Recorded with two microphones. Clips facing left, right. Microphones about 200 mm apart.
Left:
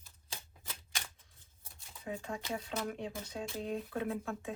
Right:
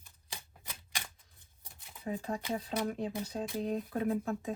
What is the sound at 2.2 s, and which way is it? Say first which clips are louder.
Speech: right 4 dB; 35° right (ahead or behind).